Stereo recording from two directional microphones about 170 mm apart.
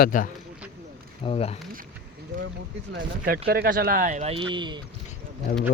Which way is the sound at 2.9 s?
75° right (ahead or behind).